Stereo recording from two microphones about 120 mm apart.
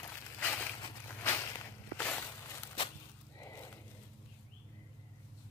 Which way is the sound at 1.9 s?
15° left (ahead or behind).